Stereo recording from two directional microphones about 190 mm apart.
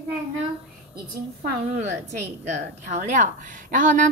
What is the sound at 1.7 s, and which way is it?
A woman's voice, 35° right (ahead or behind).